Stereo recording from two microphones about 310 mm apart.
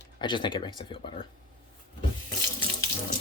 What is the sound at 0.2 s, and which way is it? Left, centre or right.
Speech, centre.